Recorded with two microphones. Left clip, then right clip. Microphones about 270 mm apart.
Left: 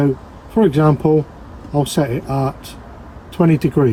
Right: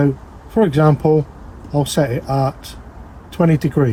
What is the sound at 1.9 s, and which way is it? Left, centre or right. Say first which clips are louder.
Speech: right 1 dB; right.